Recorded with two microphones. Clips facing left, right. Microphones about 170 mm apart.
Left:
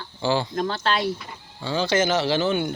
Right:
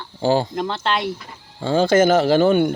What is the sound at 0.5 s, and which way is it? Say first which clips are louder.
Speech: right 1 dB; 20° right (ahead or behind).